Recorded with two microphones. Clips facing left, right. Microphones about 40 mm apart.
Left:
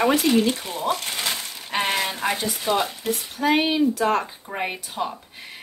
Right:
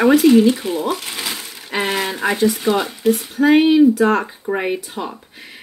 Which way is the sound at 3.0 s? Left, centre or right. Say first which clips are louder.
Right 10 dB; right.